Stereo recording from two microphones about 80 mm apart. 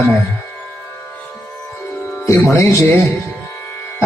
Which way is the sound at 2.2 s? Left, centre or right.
Left.